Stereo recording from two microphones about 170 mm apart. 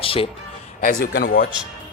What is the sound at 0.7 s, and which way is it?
Speech, 60° left (ahead or behind).